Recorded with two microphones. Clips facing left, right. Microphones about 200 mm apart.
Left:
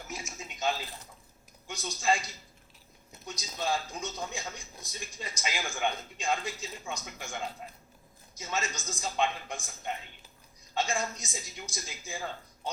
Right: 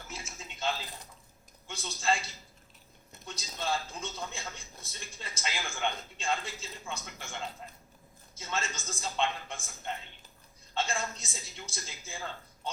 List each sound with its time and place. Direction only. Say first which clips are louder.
0.1 s a sound: left 3 dB; 15° left (ahead or behind)
1.6 s speech: left 2 dB; 15° left (ahead or behind)
10.8 s speech: left 2 dB; 15° left (ahead or behind)